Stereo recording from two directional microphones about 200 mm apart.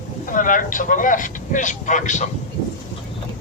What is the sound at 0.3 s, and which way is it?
Speech, 40° left (ahead or behind).